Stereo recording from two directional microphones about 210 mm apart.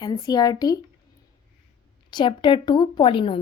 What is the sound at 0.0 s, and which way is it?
Speech, 20° left (ahead or behind).